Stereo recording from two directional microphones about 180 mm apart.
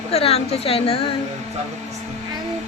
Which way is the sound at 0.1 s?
35° left (ahead or behind).